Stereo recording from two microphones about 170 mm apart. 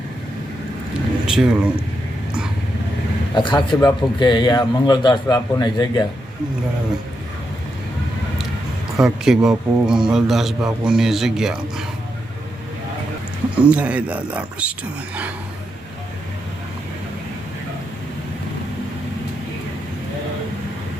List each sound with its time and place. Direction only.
1.3 s a man's voice: 5° right (ahead or behind)
3.3 s a man's voice: 25° left (ahead or behind)
9.0 s a man's voice: 5° right (ahead or behind)
13.6 s speech: 5° right (ahead or behind)